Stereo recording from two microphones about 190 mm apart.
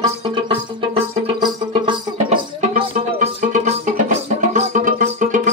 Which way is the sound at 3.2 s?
35° right (ahead or behind).